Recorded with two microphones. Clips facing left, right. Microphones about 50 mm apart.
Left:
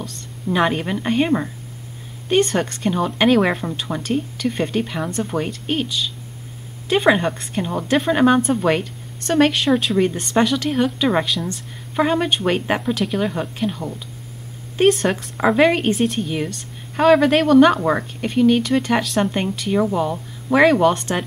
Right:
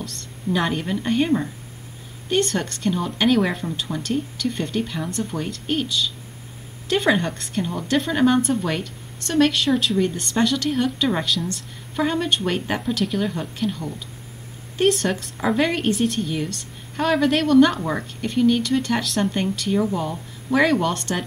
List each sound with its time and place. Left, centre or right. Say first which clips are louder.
0.0 s a woman's voice: left 1 dB; centre
12.9 s a woman's voice: left 2 dB; centre
15.3 s speech: left 7 dB; left
16.0 s a woman's voice: left 2 dB; centre
16.3 s speech: left 2 dB; left